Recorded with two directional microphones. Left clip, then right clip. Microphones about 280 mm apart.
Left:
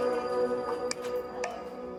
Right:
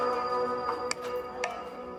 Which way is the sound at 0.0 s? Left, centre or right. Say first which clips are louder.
Even; left.